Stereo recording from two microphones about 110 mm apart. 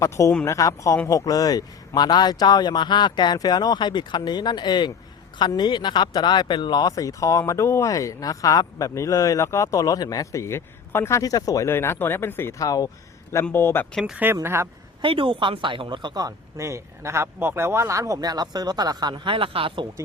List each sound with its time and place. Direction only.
0.0 s speech: 25° left (ahead or behind)
11.2 s speech: 35° left (ahead or behind)
12.5 s speech: 35° left (ahead or behind)
13.4 s speech: 20° left (ahead or behind)
14.0 s a woman's voice: 15° right (ahead or behind)
15.0 s speech: 50° right (ahead or behind)